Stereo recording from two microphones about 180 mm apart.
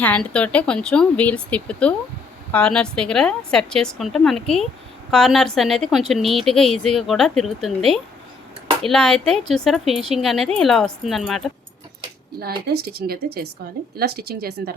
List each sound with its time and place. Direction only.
0.0 s speech: 5° left (ahead or behind)
12.4 s a woman's voice: 60° right (ahead or behind)